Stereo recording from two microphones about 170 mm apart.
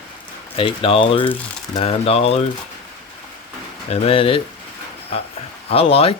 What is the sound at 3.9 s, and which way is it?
Speech, 35° left (ahead or behind).